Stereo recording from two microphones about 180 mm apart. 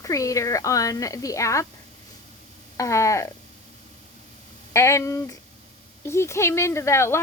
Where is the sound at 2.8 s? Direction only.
15° left (ahead or behind).